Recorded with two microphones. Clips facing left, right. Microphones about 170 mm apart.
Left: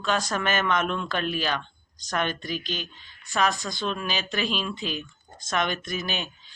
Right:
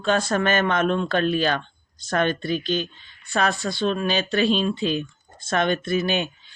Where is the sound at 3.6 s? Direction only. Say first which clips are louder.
Right 7 dB; 60° right (ahead or behind).